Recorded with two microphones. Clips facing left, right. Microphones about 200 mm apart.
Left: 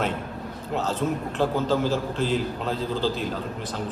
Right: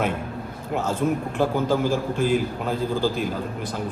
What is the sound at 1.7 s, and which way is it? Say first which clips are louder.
A man's voice: right 2 dB; 10° right (ahead or behind).